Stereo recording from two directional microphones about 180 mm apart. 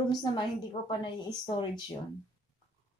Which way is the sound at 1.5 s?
25° left (ahead or behind).